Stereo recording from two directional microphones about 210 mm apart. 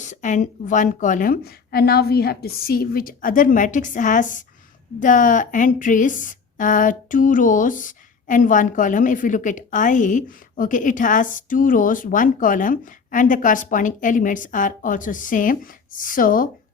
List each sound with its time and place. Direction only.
0.0 s a woman's voice: 35° left (ahead or behind)